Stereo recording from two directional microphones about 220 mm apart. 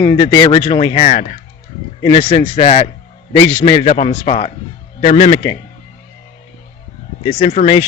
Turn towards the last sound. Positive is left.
turn(degrees=25)  # may be behind; listen again after turning